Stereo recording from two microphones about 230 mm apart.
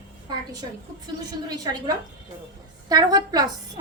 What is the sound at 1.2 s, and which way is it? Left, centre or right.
A woman's voice, centre.